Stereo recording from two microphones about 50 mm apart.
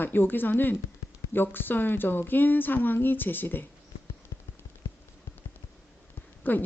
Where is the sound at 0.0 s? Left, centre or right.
Left.